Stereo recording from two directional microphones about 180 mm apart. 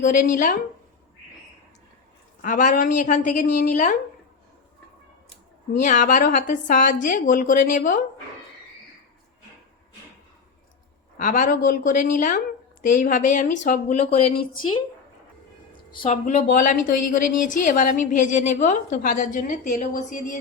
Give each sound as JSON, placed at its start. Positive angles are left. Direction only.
{"t": 0.0, "sound": "a woman's voice", "side_deg": 45}
{"t": 2.4, "sound": "a woman's voice", "side_deg": 45}
{"t": 5.8, "sound": "a woman's voice", "side_deg": 45}
{"t": 11.2, "sound": "a woman's voice", "side_deg": 50}
{"t": 15.9, "sound": "a woman's voice", "side_deg": 30}
{"t": 16.2, "sound": "a woman's voice", "side_deg": 45}